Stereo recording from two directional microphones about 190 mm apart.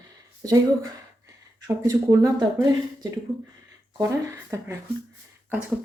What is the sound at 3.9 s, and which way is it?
Speech, 15° right (ahead or behind).